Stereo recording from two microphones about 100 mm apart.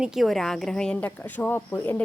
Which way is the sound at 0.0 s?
Centre (ahead or behind).